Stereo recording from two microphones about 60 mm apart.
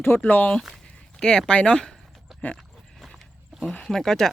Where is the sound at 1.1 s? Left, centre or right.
Centre.